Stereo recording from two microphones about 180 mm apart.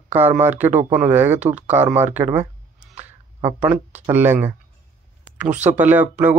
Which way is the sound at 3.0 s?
10° right (ahead or behind).